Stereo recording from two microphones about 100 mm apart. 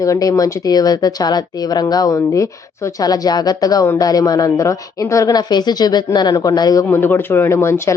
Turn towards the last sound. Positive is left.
turn(degrees=25)  # may be behind; listen again after turning